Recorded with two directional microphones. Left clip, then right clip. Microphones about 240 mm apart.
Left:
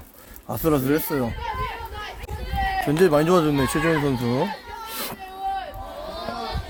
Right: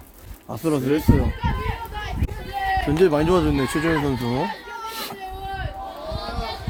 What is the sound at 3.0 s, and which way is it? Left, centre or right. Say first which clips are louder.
Speech: left 1 dB; centre.